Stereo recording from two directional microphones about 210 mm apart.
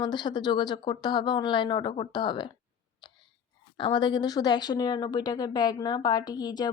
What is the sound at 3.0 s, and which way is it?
Sneeze, 20° left (ahead or behind).